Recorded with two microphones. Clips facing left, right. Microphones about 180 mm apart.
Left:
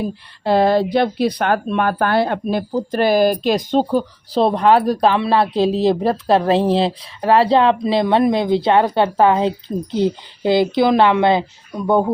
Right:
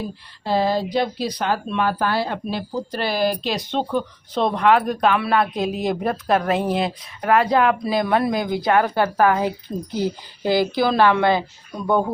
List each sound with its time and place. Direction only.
0.4 s speech: 65° left (ahead or behind); by 12.1 s 25° left (ahead or behind)